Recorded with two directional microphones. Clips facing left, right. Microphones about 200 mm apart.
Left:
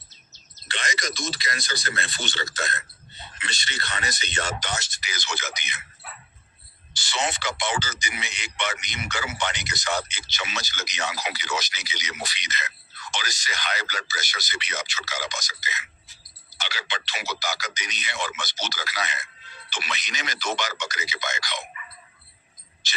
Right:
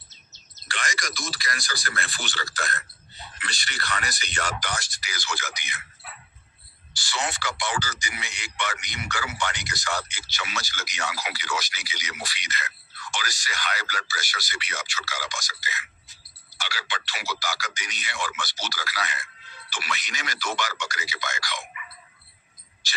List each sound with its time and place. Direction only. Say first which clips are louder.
0.7 s speech: left 2 dB; 20° left (ahead or behind)
6.9 s speech: left 2 dB; 20° left (ahead or behind)
22.8 s a sound: left 1 dB; 20° left (ahead or behind)